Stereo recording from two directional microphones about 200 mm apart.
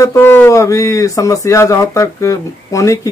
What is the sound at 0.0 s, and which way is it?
Speech, 10° left (ahead or behind).